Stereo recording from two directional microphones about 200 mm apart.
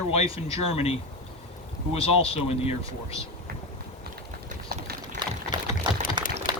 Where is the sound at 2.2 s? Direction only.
30° left (ahead or behind).